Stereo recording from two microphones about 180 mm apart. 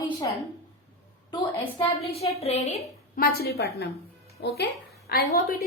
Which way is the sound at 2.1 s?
35° left (ahead or behind).